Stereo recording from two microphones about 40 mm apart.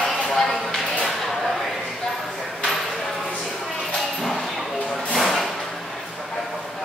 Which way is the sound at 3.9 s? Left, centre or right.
Centre.